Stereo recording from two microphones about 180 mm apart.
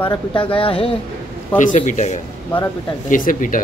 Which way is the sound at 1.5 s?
45° left (ahead or behind).